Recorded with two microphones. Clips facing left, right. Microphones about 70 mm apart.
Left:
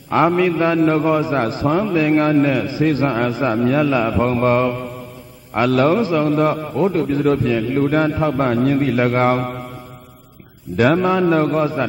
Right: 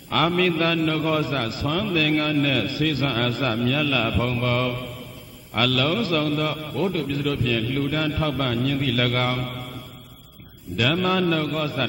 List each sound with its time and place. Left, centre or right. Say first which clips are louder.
0.1 s a man's voice: left 6 dB; left
10.8 s a man's voice: left 7 dB; left